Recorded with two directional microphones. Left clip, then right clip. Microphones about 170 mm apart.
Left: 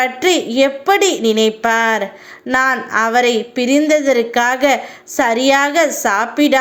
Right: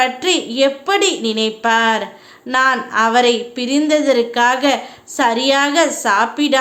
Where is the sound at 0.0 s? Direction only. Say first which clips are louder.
Left 1 dB; 20° left (ahead or behind).